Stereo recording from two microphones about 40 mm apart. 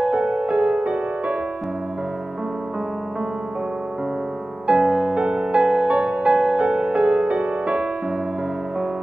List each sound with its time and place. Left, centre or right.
0.0 s music: right
4.6 s music: right